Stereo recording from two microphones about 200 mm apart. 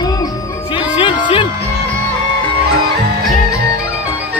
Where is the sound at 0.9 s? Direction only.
25° left (ahead or behind).